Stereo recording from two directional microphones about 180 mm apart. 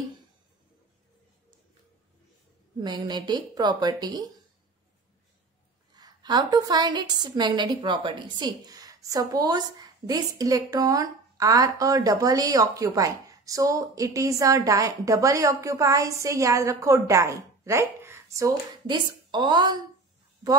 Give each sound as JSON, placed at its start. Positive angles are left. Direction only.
{"t": 2.8, "sound": "a woman's voice", "side_deg": -25}
{"t": 5.9, "sound": "a woman's voice", "side_deg": -25}